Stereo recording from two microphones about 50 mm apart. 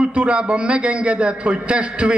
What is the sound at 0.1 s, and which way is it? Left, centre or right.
A man's voice, right.